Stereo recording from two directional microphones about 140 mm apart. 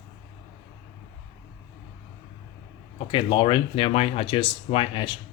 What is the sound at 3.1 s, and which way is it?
Speech, 40° left (ahead or behind).